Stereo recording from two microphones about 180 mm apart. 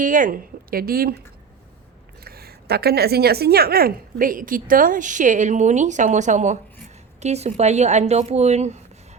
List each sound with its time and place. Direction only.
0.0 s speech: 50° right (ahead or behind)
2.2 s a woman's voice: 60° right (ahead or behind); by 8.8 s 40° right (ahead or behind)